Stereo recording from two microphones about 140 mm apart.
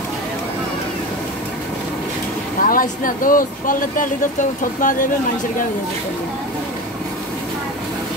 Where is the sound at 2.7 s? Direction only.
80° left.